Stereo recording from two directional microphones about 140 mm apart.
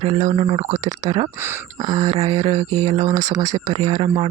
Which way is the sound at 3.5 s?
25° right (ahead or behind).